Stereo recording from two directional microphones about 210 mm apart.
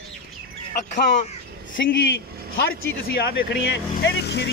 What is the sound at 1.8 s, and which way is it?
Speech, 55° left (ahead or behind).